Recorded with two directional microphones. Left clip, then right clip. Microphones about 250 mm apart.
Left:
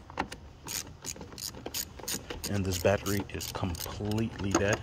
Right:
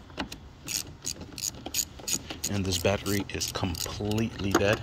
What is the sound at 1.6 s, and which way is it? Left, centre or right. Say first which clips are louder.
Ratchet: right 5 dB; centre.